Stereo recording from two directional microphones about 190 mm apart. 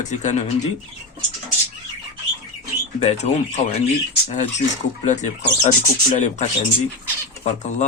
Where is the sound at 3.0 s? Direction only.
35° left (ahead or behind).